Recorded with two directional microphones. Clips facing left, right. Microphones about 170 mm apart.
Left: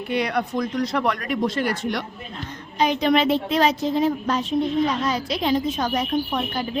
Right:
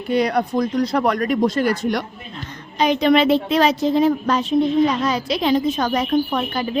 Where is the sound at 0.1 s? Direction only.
40° right (ahead or behind).